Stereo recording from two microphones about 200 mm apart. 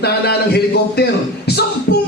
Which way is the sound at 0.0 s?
55° left (ahead or behind).